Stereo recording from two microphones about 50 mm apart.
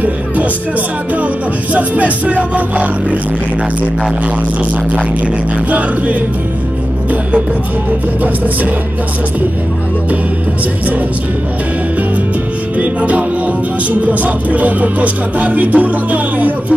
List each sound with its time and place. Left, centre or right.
1.1 s music: right
5.7 s music: right
12.7 s music: right